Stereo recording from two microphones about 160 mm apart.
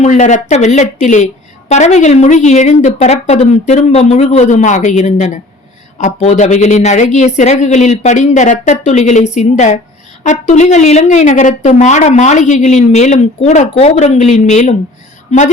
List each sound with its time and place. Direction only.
0.0 s a woman's voice: 50° left (ahead or behind)